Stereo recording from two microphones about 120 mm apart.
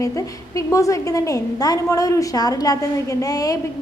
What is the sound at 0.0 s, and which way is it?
A woman's voice, 25° left (ahead or behind).